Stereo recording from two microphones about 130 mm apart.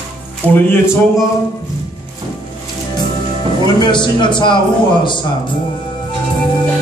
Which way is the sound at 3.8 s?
35° left (ahead or behind).